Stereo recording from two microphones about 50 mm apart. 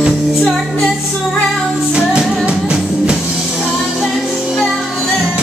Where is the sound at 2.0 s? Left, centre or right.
Centre.